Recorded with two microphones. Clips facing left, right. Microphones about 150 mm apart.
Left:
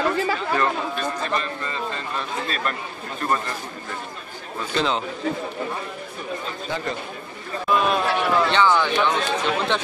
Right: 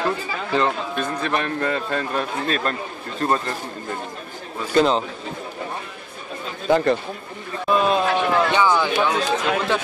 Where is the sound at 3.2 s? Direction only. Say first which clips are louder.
Right 3 dB; 35° right (ahead or behind).